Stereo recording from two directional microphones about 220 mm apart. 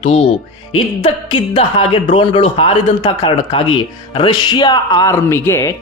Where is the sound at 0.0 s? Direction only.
30° left (ahead or behind).